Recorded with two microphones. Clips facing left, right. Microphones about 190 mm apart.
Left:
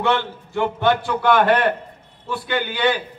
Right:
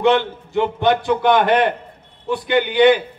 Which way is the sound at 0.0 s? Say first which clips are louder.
Right 5 dB; 20° right (ahead or behind).